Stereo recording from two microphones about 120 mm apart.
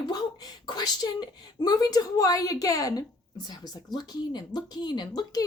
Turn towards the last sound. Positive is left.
turn(degrees=35)  # may be behind; listen again after turning